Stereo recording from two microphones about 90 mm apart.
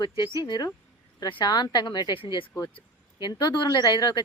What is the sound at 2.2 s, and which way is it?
Speech, 70° left (ahead or behind).